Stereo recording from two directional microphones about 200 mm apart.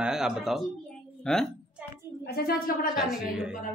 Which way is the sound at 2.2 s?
50° left (ahead or behind).